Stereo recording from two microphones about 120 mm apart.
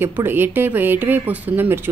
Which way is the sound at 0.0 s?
15° right (ahead or behind).